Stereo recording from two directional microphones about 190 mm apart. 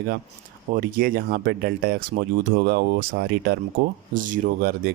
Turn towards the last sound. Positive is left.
turn(degrees=-50)  # may be behind; listen again after turning